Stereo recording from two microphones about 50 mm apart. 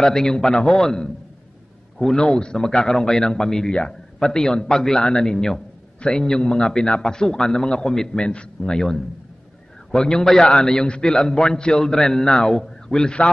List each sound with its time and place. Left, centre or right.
0.0 s a man's voice: centre